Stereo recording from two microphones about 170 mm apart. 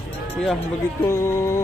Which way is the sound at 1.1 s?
15° left (ahead or behind).